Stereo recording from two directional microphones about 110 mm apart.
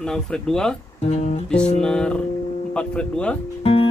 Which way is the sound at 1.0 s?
75° left (ahead or behind).